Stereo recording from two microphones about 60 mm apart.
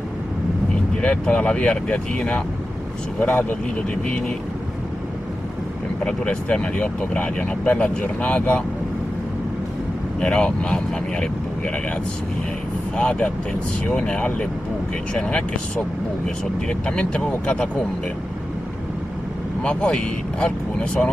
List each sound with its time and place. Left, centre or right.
1.0 s speech: left
6.0 s speech: centre
10.2 s speech: centre
12.9 s speech: centre
19.6 s speech: centre